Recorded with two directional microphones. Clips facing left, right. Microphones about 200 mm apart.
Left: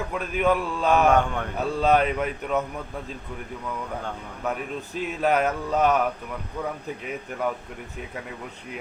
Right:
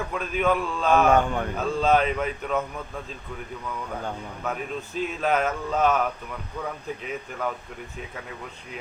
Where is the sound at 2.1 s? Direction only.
5° left (ahead or behind).